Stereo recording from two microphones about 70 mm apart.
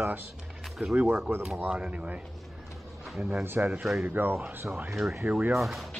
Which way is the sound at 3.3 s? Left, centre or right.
Right.